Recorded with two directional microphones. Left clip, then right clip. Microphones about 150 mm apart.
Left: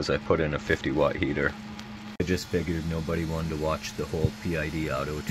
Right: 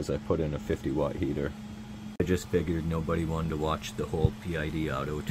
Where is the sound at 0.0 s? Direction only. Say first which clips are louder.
Left 5 dB; 25° right (ahead or behind).